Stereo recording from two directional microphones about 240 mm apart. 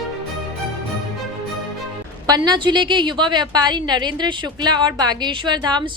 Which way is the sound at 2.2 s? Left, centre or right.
Centre.